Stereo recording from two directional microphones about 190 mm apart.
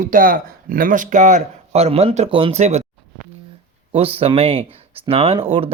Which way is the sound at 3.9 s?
30° right (ahead or behind).